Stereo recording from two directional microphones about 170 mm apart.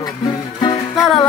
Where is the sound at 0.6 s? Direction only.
25° left (ahead or behind).